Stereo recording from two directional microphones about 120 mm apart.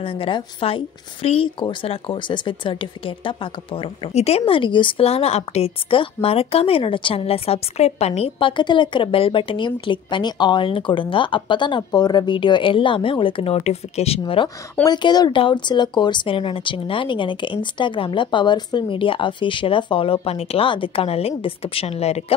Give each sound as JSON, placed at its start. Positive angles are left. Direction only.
{"t": 0.0, "sound": "speech", "side_deg": 50}